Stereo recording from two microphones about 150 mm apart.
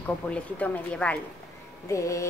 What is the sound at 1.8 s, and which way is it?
Music, 20° left (ahead or behind).